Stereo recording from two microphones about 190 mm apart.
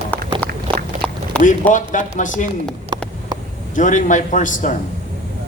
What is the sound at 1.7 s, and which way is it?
Speech, 40° left (ahead or behind).